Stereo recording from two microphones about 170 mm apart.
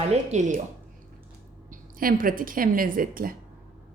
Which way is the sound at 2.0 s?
55° right (ahead or behind).